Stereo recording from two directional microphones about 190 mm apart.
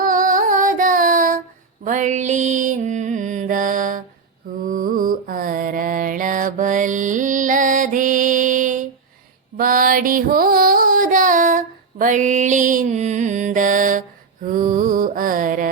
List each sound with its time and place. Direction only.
0.0 s music: 45° right (ahead or behind)
1.8 s mantra: 40° right (ahead or behind)
9.6 s music: 50° right (ahead or behind)
14.4 s mantra: 45° right (ahead or behind)